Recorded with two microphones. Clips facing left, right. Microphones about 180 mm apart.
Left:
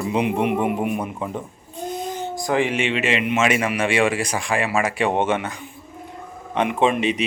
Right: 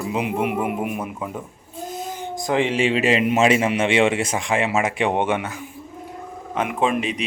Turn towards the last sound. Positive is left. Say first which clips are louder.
# left 2 dB
turn(degrees=0)  # may be behind; listen again after turning